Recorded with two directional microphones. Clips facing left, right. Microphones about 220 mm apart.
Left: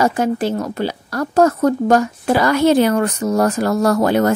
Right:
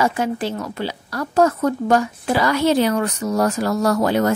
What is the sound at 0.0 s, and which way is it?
Speech, 45° left (ahead or behind).